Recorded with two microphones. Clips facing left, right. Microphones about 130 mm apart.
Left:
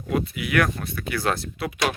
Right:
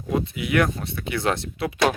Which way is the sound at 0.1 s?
25° right (ahead or behind).